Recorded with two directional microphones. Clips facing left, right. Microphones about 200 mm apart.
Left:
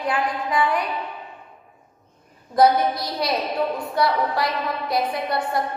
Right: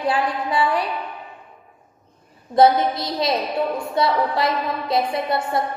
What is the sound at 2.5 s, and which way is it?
A woman's voice, 25° right (ahead or behind).